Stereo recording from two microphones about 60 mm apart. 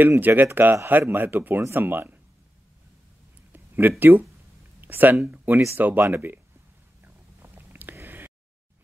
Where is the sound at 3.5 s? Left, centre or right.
Right.